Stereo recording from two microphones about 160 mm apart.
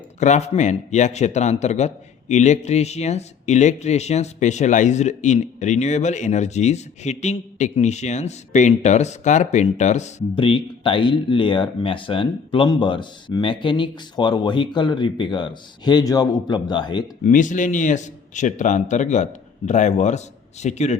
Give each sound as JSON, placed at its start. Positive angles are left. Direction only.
{"t": 0.2, "sound": "speech", "side_deg": 45}
{"t": 10.3, "sound": "speech", "side_deg": 30}
{"t": 17.2, "sound": "speech", "side_deg": 55}